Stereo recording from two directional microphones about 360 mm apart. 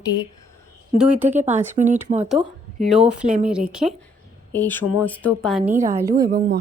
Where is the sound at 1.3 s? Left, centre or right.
Centre.